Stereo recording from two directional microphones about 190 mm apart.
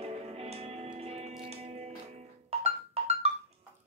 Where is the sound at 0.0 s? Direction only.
30° right (ahead or behind).